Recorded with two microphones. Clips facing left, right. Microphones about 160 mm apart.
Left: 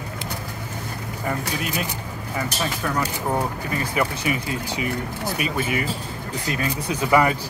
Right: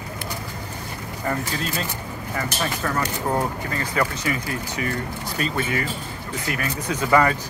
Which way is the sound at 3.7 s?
15° left (ahead or behind).